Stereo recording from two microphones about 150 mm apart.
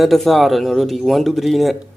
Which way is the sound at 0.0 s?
Centre (ahead or behind).